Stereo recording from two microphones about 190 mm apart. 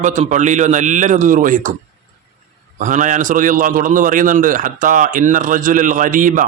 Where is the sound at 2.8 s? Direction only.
40° right (ahead or behind).